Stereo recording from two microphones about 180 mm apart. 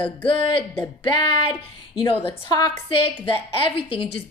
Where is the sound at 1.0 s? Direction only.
25° left (ahead or behind).